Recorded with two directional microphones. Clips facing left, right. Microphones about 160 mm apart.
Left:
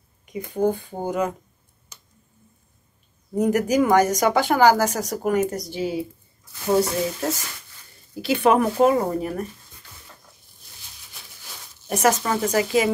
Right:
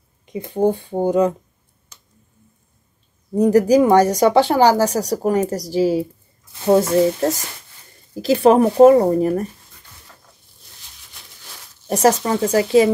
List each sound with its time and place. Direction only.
0.2 s speech: 30° right (ahead or behind)
3.3 s speech: 30° right (ahead or behind)
11.9 s speech: 35° right (ahead or behind)